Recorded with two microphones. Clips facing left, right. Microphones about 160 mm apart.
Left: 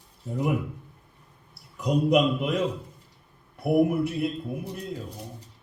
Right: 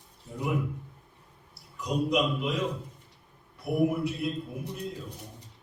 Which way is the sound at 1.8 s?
55° left (ahead or behind).